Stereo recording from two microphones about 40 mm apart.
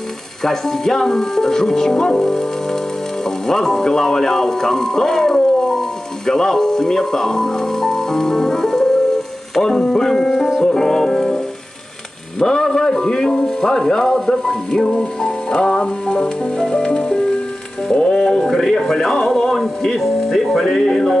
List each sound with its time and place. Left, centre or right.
0.4 s speech: centre
3.3 s music: centre
12.4 s music: centre
18.1 s speech: centre